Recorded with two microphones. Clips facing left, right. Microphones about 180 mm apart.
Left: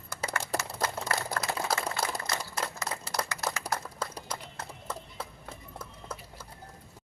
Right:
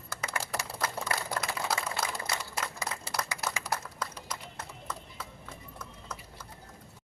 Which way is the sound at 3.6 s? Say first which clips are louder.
Left 1 dB; 35° left (ahead or behind).